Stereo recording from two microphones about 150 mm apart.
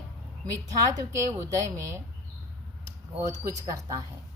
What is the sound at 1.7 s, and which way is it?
Speech, 20° right (ahead or behind).